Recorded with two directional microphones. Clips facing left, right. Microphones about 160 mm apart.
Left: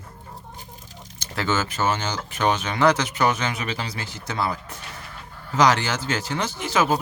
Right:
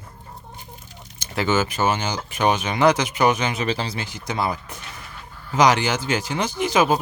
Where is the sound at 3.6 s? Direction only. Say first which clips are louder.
Right 5 dB; 30° right (ahead or behind).